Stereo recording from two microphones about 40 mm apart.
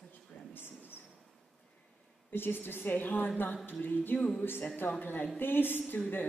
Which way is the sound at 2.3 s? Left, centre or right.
Left.